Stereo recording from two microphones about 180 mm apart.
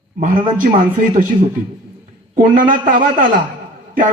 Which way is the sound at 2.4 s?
50° right (ahead or behind).